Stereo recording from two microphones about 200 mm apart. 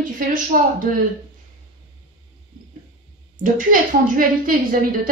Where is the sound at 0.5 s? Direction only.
45° right (ahead or behind).